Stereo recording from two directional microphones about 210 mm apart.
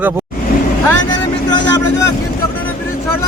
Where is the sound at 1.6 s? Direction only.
60° left (ahead or behind).